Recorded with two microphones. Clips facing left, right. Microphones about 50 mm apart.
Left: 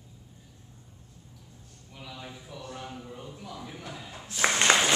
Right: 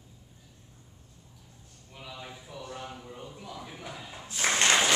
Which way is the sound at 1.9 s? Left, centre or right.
Centre.